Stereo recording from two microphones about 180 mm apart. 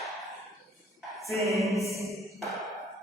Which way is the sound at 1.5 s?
Centre (ahead or behind).